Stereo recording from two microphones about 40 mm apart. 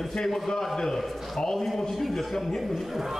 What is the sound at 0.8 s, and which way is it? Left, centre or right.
A man's voice, centre.